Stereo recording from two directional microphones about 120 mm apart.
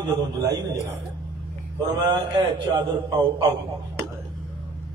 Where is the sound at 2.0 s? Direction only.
30° right (ahead or behind).